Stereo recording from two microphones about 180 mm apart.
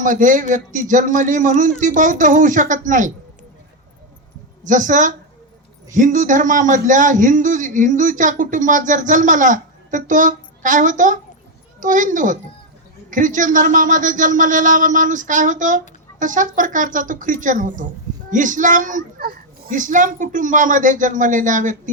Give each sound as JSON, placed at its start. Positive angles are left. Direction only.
{"t": 0.0, "sound": "a man's voice", "side_deg": -45}
{"t": 4.6, "sound": "a man's voice", "side_deg": -45}